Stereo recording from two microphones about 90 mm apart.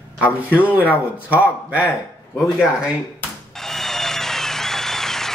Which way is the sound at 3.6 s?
5° left (ahead or behind).